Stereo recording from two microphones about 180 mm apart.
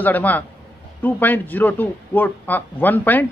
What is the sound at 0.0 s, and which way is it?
A man's voice, 10° left (ahead or behind).